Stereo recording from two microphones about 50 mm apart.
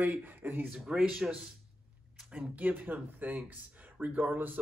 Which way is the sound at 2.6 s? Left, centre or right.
Right.